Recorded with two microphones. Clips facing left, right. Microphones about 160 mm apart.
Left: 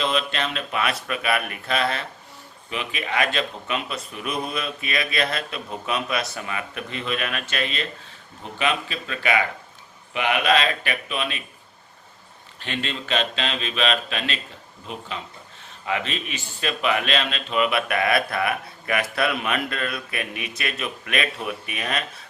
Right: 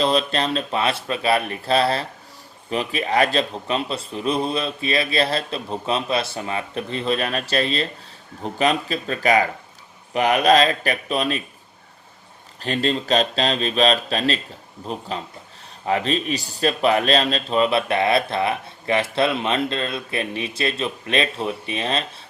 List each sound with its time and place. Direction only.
0.0 s speech: 35° right (ahead or behind)
12.6 s a man's voice: 40° right (ahead or behind)